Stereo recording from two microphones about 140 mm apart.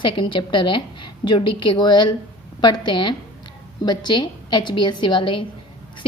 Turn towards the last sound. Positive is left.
turn(degrees=35)  # may be behind; listen again after turning